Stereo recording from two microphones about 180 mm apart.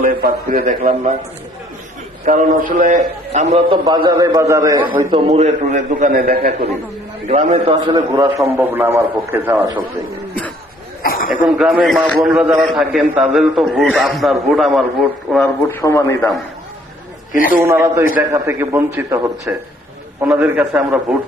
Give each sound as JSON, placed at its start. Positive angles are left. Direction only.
{"t": 0.0, "sound": "a man's voice", "side_deg": -55}
{"t": 2.2, "sound": "a man's voice", "side_deg": -45}
{"t": 3.7, "sound": "a man's voice", "side_deg": -25}
{"t": 5.1, "sound": "a man's voice", "side_deg": -30}
{"t": 7.3, "sound": "a man's voice", "side_deg": -40}
{"t": 11.0, "sound": "a sound", "side_deg": 50}
{"t": 11.4, "sound": "a man's voice", "side_deg": 0}
{"t": 15.7, "sound": "a man's voice", "side_deg": 15}
{"t": 17.7, "sound": "a man's voice", "side_deg": -10}